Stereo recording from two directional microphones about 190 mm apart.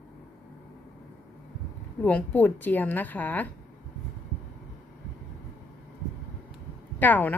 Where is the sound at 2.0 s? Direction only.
10° left (ahead or behind).